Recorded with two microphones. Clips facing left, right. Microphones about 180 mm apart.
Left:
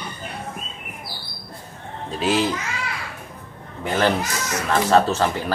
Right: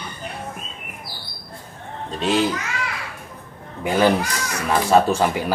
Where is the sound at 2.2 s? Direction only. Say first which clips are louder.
Right 1 dB; centre (ahead or behind).